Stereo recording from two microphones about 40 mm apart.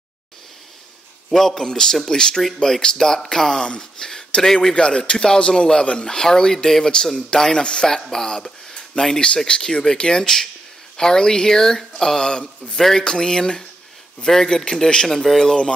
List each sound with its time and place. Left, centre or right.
1.3 s a man's voice: centre